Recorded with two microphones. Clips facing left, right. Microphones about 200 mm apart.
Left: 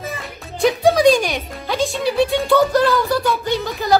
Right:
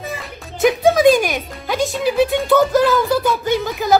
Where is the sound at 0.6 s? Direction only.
Centre (ahead or behind).